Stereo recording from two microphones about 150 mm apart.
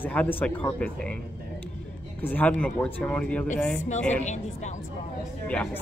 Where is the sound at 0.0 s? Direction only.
10° left (ahead or behind).